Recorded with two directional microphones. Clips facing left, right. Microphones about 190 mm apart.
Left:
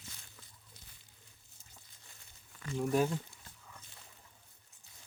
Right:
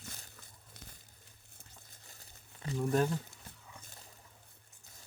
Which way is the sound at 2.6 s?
30° right (ahead or behind).